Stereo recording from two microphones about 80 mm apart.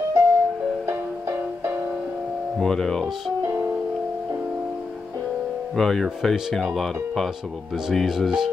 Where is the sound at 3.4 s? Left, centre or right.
Right.